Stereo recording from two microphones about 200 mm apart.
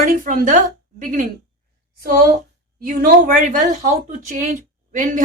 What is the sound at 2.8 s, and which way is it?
A woman's voice, 45° right (ahead or behind).